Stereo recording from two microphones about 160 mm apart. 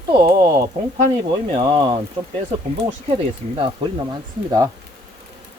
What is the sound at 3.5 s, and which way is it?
Speech, 30° right (ahead or behind).